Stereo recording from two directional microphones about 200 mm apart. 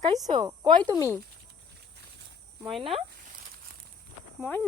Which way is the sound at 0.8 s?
10° left (ahead or behind).